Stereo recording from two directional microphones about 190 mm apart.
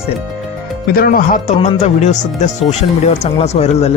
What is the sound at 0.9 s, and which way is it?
A man's voice, 50° left (ahead or behind).